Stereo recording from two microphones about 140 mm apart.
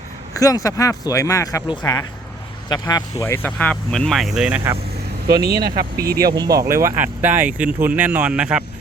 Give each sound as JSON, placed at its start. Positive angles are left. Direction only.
{"t": 0.3, "sound": "speech", "side_deg": 25}
{"t": 5.3, "sound": "speech", "side_deg": -25}